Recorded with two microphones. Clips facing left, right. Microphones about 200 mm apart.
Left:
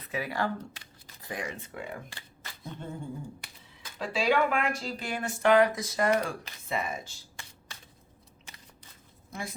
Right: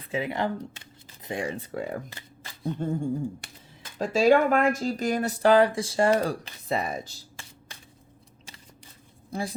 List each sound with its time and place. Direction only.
0.1 s speech: 20° right (ahead or behind); by 7.2 s 40° right (ahead or behind)
9.3 s a woman's voice: 35° right (ahead or behind)